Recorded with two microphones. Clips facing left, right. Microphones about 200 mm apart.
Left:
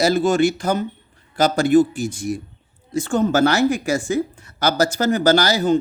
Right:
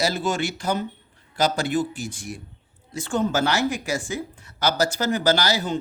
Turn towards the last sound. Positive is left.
turn(degrees=45)  # may be behind; listen again after turning